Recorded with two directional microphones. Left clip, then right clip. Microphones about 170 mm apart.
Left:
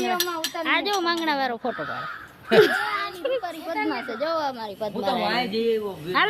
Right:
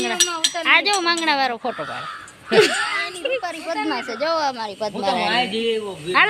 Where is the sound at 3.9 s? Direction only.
15° right (ahead or behind).